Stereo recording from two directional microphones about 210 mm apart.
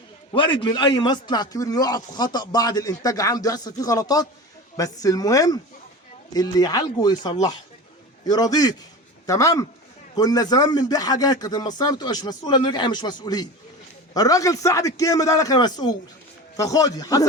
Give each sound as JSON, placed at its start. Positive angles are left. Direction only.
{"t": 0.3, "sound": "a man's voice", "side_deg": 25}